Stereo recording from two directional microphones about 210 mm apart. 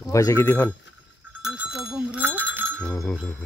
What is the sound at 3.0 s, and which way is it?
Speech, 10° left (ahead or behind).